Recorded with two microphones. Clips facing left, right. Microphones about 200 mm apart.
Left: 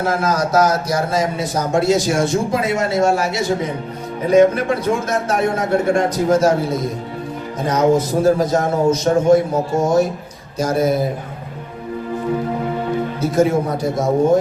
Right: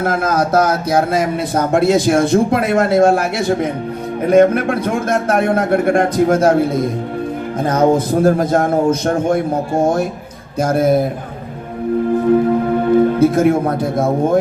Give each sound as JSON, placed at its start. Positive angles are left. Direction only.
{"t": 0.0, "sound": "speech", "side_deg": -55}
{"t": 13.1, "sound": "speech", "side_deg": -55}